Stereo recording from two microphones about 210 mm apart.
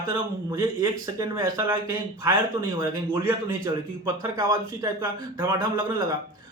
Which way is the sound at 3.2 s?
15° right (ahead or behind).